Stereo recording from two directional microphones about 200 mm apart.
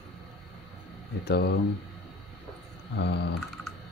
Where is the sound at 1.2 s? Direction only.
55° left (ahead or behind).